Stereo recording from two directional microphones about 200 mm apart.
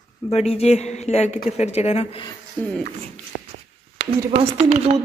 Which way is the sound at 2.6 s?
10° left (ahead or behind).